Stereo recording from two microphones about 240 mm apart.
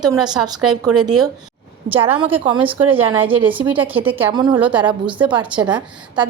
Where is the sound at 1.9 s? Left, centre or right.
Right.